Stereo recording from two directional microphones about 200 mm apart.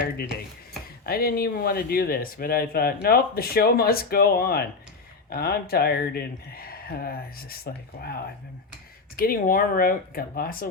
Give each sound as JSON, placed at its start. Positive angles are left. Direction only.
{"t": 1.0, "sound": "speech", "side_deg": 50}